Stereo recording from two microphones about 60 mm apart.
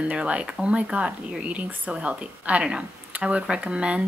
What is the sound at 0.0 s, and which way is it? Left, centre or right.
Speech, centre.